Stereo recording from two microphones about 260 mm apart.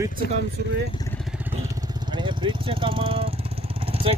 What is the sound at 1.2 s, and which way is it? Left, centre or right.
Speech, centre.